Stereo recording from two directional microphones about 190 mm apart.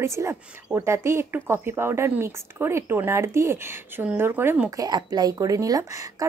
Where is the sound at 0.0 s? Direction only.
15° right (ahead or behind).